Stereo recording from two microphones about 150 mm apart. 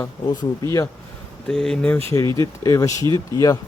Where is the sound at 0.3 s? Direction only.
20° left (ahead or behind).